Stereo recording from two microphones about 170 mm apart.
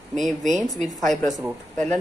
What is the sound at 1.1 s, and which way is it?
Speech, 45° right (ahead or behind).